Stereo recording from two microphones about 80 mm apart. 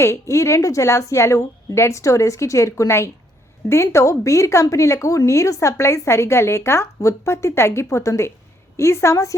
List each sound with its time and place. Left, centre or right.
0.0 s speech: left